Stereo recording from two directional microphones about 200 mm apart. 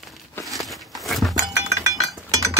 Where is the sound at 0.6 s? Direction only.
Centre (ahead or behind).